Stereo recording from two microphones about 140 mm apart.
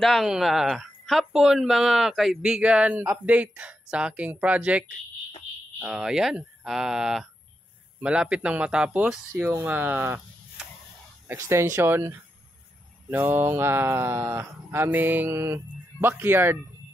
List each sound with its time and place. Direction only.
0.0 s speech: centre (ahead or behind); by 16.5 s 15° right (ahead or behind)